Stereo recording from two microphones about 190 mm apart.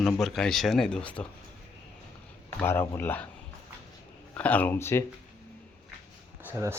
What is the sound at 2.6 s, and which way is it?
Speech, 10° left (ahead or behind).